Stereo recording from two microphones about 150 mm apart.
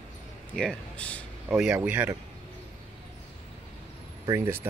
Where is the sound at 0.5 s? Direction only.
5° left (ahead or behind).